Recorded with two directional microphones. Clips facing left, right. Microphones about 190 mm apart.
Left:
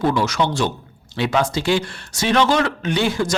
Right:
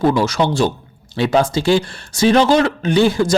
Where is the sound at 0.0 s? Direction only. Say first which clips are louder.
Right 4 dB; 35° right (ahead or behind).